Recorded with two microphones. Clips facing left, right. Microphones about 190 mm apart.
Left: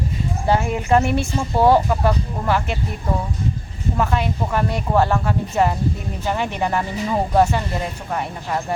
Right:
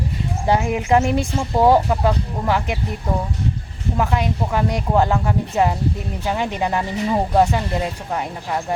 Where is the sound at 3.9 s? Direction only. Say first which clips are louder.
Right 1 dB; 15° right (ahead or behind).